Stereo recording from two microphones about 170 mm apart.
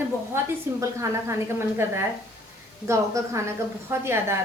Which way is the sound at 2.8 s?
15° right (ahead or behind).